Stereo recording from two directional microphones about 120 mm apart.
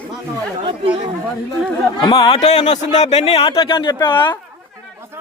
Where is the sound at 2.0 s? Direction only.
40° left (ahead or behind).